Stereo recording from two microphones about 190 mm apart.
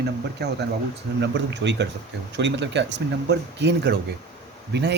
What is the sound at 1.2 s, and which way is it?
Speech, 65° right (ahead or behind).